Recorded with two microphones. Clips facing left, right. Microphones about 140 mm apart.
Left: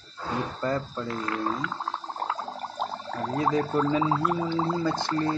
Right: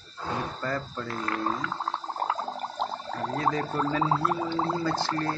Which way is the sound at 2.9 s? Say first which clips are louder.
Left 1 dB; centre (ahead or behind).